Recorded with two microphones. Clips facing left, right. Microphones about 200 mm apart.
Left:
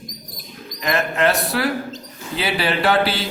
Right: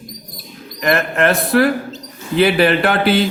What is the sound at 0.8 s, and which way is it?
A man's voice, 60° right (ahead or behind).